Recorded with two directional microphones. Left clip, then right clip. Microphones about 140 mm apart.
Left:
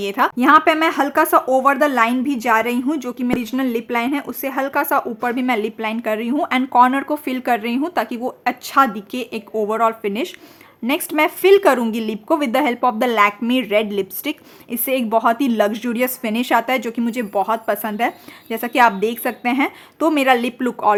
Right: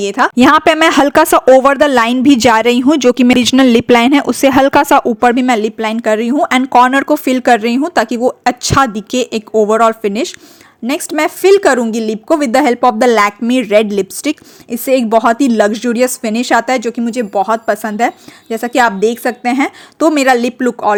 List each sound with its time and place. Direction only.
0.0 s a woman's voice: 30° right (ahead or behind)
0.3 s a woman's voice: 65° right (ahead or behind); by 20.9 s 25° right (ahead or behind)